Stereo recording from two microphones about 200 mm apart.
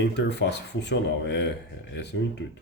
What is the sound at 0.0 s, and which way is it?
Speech, 60° left (ahead or behind).